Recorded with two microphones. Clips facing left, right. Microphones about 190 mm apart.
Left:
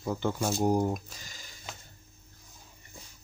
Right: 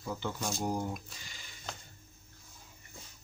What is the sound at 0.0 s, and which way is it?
Speech, 45° left (ahead or behind).